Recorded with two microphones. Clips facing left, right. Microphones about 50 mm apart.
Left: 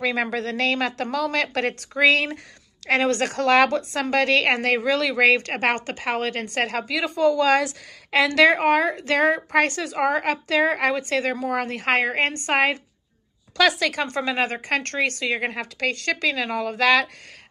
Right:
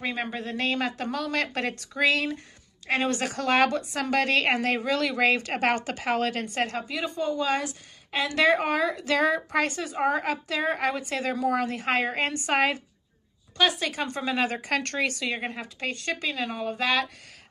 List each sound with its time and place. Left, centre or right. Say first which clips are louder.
0.0 s a woman's voice: left 7 dB; left
6.4 s speech: left 3 dB; left
6.9 s a woman's voice: left 8 dB; left
8.3 s a woman's voice: left 4 dB; left
11.4 s a woman's voice: left 2 dB; left
13.6 s speech: left 5 dB; left